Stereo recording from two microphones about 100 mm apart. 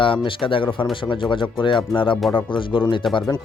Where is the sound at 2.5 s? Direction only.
55° left (ahead or behind).